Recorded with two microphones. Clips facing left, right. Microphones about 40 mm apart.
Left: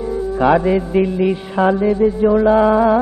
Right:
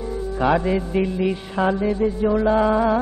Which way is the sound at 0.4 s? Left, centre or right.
Centre.